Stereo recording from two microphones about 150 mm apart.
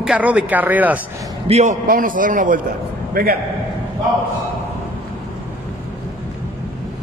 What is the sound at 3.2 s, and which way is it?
Speech, 90° right.